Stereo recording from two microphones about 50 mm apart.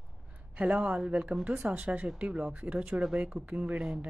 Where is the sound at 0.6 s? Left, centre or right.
Right.